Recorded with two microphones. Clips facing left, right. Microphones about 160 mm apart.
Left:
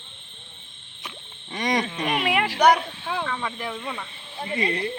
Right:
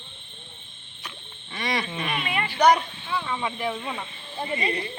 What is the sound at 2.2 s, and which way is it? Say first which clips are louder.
Speech: left 6 dB; 75° left (ahead or behind).